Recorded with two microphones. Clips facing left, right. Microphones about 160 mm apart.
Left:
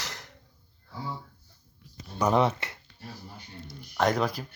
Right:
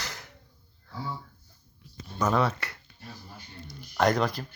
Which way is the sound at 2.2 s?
20° left (ahead or behind).